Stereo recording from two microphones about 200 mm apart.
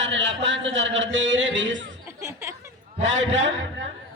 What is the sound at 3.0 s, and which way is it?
Speech, 70° right (ahead or behind).